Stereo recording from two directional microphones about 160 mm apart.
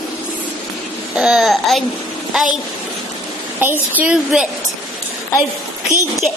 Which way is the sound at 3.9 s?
5° right (ahead or behind).